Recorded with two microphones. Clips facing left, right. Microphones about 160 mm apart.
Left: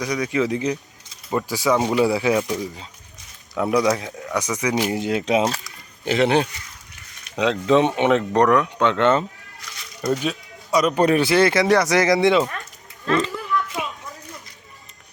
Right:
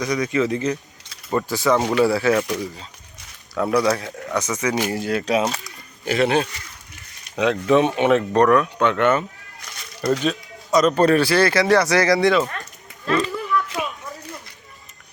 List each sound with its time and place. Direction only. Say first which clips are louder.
0.0 s speech: right 1 dB; 10° left (ahead or behind)
10.0 s speech: right 2 dB; 10° left (ahead or behind)